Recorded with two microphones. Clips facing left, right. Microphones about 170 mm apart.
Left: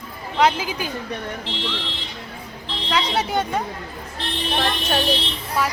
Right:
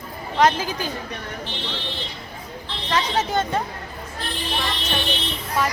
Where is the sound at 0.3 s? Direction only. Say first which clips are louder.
Even; 10° left (ahead or behind).